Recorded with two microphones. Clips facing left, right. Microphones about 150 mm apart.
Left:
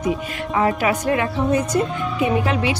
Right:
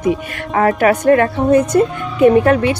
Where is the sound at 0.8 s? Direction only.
55° right (ahead or behind).